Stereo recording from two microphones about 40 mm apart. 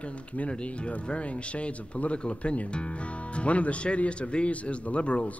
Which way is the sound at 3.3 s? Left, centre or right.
Left.